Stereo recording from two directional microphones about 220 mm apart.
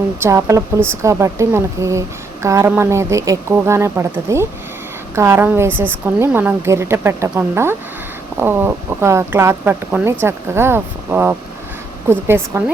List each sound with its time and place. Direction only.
0.2 s a woman's voice: 15° right (ahead or behind)